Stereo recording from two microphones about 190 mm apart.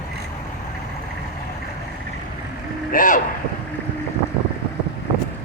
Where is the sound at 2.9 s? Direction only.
45° left (ahead or behind).